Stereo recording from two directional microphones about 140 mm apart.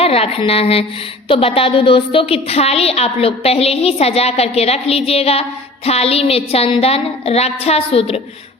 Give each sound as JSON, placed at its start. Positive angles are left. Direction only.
{"t": 0.0, "sound": "a woman's voice", "side_deg": 45}